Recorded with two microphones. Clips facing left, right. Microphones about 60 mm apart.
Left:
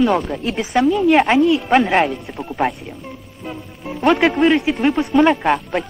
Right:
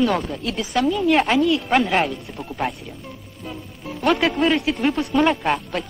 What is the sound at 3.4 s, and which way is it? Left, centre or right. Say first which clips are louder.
Speech: left 3 dB; left.